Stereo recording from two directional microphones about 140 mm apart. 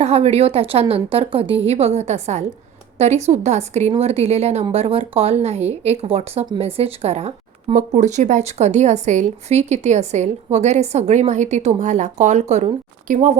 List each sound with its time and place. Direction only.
0.0 s a woman's voice: 50° right (ahead or behind)